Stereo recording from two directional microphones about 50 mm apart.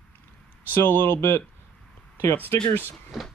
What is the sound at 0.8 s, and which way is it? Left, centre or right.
Speech, left.